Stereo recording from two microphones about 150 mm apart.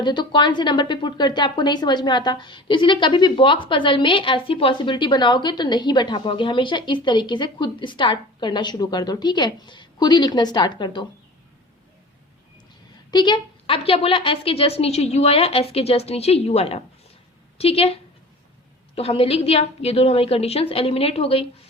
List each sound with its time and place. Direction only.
0.0 s a woman's voice: 30° left (ahead or behind)
13.1 s a woman's voice: 30° left (ahead or behind)
18.9 s a woman's voice: 40° left (ahead or behind)